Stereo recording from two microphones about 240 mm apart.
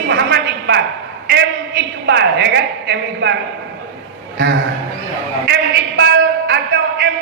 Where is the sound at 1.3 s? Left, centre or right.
Right.